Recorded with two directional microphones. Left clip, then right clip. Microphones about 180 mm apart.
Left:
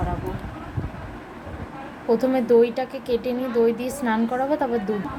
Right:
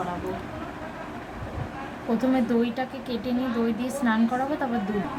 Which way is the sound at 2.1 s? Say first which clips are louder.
Left 7 dB; 30° left (ahead or behind).